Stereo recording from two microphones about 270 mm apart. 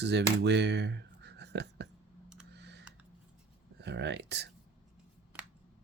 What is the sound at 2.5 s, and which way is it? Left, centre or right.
Computer keyboard, right.